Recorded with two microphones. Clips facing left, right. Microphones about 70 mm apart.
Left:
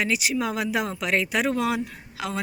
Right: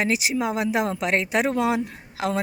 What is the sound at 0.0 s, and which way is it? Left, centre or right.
Speech, right.